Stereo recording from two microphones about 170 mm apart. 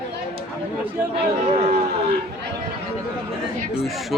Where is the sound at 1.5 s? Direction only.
40° right (ahead or behind).